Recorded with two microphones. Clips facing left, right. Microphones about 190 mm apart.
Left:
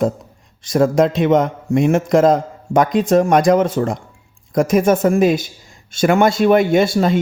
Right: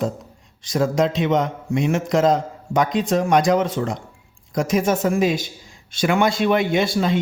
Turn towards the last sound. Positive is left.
turn(degrees=50)  # may be behind; listen again after turning